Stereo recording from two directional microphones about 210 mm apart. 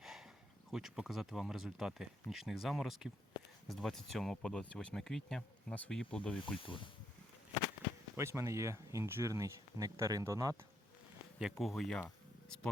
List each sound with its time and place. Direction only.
0.0 s a sound: centre (ahead or behind)
0.7 s speech: centre (ahead or behind)
6.6 s speech: 25° left (ahead or behind)
8.1 s speech: 10° right (ahead or behind)
11.6 s speech: centre (ahead or behind)